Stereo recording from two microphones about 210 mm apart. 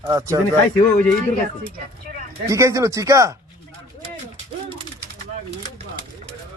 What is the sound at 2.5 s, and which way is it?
Speech, 15° right (ahead or behind).